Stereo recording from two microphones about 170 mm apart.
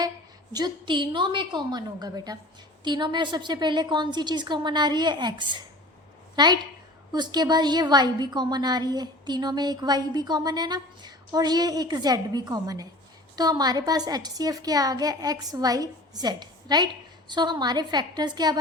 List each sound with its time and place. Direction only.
0.5 s a woman's voice: 25° right (ahead or behind)